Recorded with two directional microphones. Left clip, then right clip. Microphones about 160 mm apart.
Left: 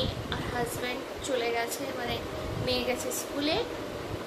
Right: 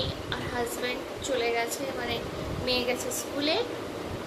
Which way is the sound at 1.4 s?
10° left (ahead or behind).